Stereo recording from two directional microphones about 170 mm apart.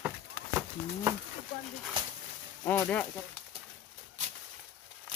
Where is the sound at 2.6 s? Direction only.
15° left (ahead or behind).